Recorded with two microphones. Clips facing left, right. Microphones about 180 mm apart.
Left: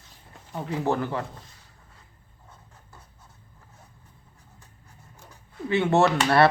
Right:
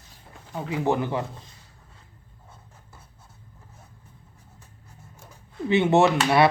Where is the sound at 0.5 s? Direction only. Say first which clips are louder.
Right 2 dB; 10° right (ahead or behind).